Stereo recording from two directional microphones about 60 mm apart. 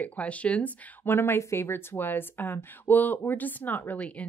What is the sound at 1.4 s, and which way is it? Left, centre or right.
Speech, left.